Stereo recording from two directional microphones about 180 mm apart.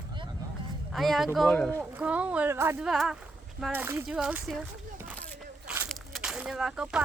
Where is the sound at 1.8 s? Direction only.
5° right (ahead or behind).